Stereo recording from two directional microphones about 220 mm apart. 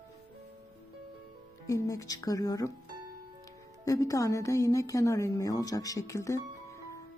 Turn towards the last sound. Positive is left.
turn(degrees=15)  # may be behind; listen again after turning